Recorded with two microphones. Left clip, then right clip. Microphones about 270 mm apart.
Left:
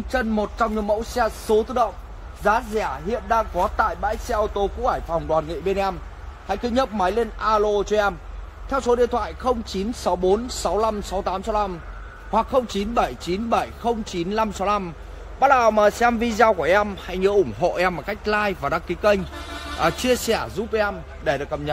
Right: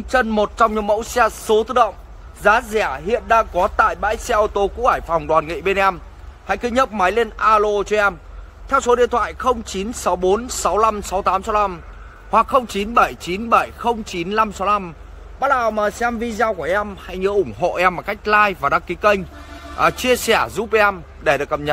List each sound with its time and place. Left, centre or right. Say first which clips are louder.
0.1 s speech: right 7 dB; right
5.5 s a man's voice: right 6 dB; centre